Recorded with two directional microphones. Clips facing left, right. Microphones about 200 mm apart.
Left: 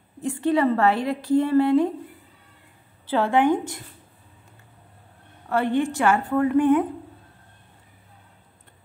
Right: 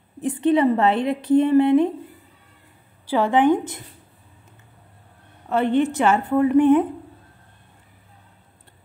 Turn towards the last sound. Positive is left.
turn(degrees=-20)  # may be behind; listen again after turning